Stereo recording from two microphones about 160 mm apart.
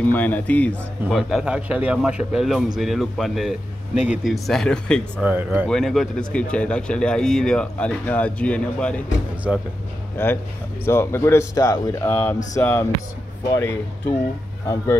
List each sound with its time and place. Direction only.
0.0 s speech: 10° left (ahead or behind)
3.9 s speech: 45° left (ahead or behind)
4.2 s speech: centre (ahead or behind)
5.2 s speech: 10° right (ahead or behind)
5.7 s speech: centre (ahead or behind)
10.1 s speech: 15° left (ahead or behind)